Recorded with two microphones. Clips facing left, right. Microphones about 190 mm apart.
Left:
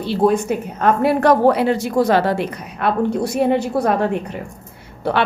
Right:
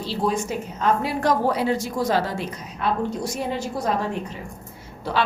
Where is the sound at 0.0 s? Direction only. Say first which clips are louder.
Left 8 dB; 55° left (ahead or behind).